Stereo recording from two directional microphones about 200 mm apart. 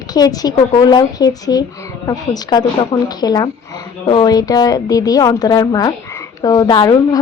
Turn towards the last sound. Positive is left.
turn(degrees=20)  # may be behind; listen again after turning